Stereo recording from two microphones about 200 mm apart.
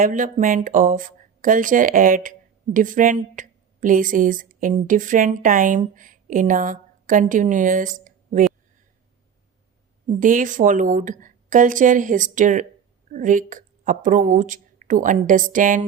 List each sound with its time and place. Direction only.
0.0 s a woman's voice: 40° right (ahead or behind)
10.1 s a woman's voice: 40° right (ahead or behind)